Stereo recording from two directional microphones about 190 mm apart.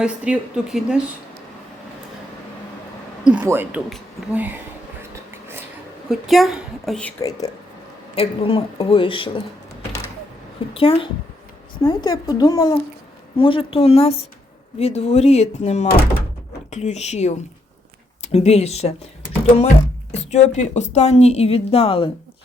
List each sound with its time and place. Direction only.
0.0 s a woman's voice: 5° right (ahead or behind)
3.2 s a woman's voice: 10° right (ahead or behind)
6.1 s a woman's voice: centre (ahead or behind)
7.2 s speech: 15° left (ahead or behind)
8.1 s speech: 30° left (ahead or behind)
10.8 s speech: 30° left (ahead or behind)